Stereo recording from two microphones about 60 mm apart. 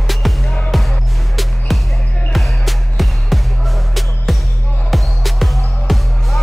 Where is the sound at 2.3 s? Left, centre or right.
Centre.